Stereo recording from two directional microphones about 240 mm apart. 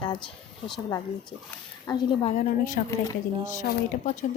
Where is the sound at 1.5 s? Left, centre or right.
Centre.